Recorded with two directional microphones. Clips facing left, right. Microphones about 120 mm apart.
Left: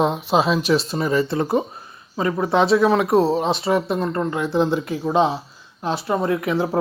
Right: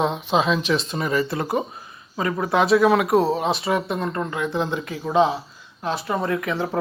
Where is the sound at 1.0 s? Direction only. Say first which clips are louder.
Left 3 dB; 30° left (ahead or behind).